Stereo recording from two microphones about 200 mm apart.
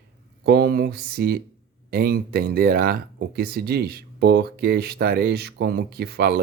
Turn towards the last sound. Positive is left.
turn(degrees=-50)  # may be behind; listen again after turning